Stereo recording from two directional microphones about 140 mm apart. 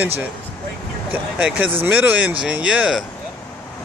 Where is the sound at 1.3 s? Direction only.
10° right (ahead or behind).